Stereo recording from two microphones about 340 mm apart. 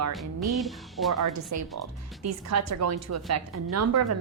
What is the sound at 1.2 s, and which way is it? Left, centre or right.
Speech, right.